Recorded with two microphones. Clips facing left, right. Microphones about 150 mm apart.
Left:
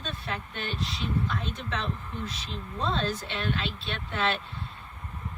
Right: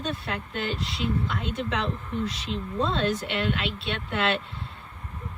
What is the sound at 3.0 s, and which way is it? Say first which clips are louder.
Speech: right 5 dB; 75° right (ahead or behind).